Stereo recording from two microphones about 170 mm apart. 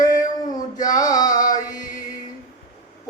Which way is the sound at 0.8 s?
20° left (ahead or behind).